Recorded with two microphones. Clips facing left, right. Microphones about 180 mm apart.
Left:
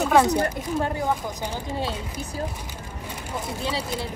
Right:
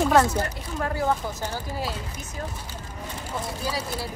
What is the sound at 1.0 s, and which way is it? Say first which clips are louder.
Speech: even; 15° left (ahead or behind).